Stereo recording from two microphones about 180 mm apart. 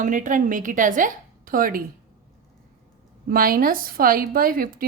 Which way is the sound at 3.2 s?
55° right (ahead or behind).